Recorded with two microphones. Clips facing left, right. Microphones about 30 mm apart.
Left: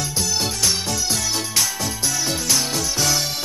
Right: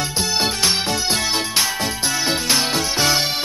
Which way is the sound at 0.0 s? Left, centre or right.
Right.